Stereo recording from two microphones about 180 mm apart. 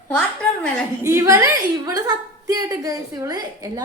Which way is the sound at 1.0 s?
15° right (ahead or behind).